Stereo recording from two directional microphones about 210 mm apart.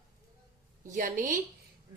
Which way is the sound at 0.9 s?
40° right (ahead or behind).